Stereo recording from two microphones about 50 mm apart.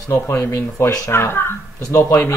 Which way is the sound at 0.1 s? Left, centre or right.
Left.